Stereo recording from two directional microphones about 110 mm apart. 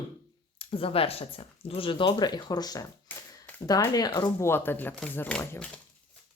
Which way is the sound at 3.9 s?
40° left (ahead or behind).